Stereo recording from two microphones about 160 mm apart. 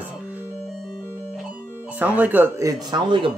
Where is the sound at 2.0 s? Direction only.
10° right (ahead or behind); by 3.3 s 30° right (ahead or behind).